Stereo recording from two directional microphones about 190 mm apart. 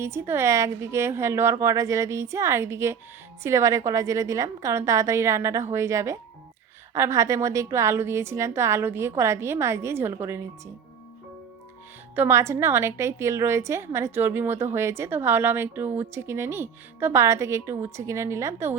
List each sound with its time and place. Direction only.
0.0 s a woman's voice: 15° right (ahead or behind)
12.1 s a woman's voice: 15° right (ahead or behind)